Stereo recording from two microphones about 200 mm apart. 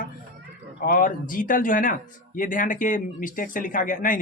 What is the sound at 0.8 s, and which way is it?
Speech, 45° left (ahead or behind).